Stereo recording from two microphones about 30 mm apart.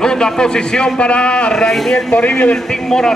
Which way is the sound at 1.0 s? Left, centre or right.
Left.